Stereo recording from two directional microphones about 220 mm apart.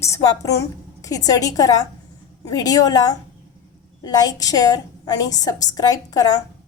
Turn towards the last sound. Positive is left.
turn(degrees=15)  # may be behind; listen again after turning